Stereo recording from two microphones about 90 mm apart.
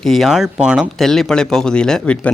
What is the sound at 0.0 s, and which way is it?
Speech, centre (ahead or behind).